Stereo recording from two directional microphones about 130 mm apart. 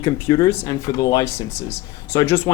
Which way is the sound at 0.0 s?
30° left (ahead or behind).